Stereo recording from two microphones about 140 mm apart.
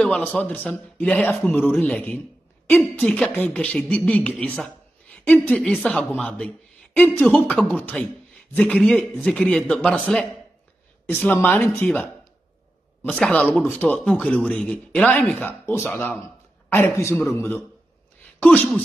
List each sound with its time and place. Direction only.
0.0 s a woman's voice: 5° left (ahead or behind)
11.2 s a woman's voice: 10° left (ahead or behind)